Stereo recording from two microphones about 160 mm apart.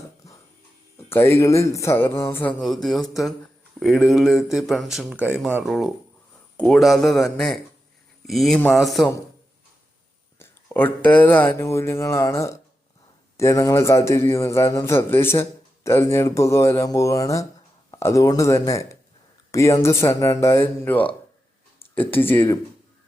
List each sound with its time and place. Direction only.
0.9 s a man's voice: 15° left (ahead or behind)
2.6 s speech: centre (ahead or behind)
10.3 s a man's voice: 15° left (ahead or behind)